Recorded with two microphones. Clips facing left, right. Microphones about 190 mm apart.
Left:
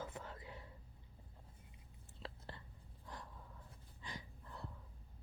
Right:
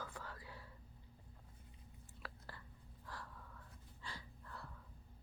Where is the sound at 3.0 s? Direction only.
20° left (ahead or behind).